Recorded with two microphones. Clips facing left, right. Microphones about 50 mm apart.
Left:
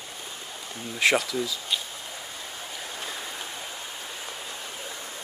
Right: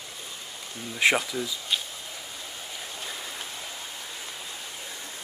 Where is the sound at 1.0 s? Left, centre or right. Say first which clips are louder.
Even; centre.